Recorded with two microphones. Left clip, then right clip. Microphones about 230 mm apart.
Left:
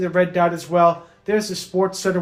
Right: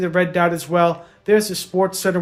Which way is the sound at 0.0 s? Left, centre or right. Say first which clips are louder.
Even; right.